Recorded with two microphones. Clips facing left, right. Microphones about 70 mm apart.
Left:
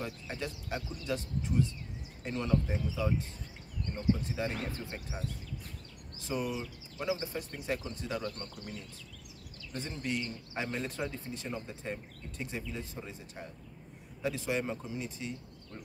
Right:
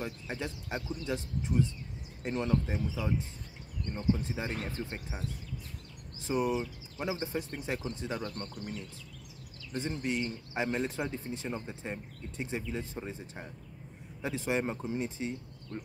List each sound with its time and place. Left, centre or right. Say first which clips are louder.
0.0 s speech: right 1 dB; right
4.2 s speech: left 1 dB; right
6.2 s speech: right 5 dB; right
9.8 s speech: right 3 dB; right